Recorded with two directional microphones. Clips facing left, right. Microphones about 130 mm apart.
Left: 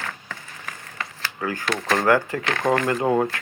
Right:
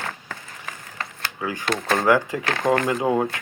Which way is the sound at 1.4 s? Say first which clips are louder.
Even; 15° right (ahead or behind).